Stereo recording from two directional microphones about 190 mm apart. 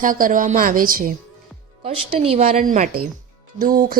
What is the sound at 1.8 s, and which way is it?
A woman's voice, 30° right (ahead or behind).